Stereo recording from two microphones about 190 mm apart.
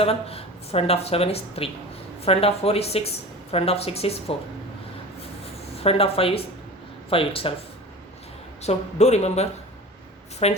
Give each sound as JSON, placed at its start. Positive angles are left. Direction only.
{"t": 0.0, "sound": "speech", "side_deg": 30}
{"t": 5.7, "sound": "speech", "side_deg": 30}
{"t": 8.6, "sound": "speech", "side_deg": 35}